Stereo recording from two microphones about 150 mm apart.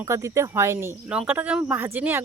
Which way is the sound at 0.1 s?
20° right (ahead or behind).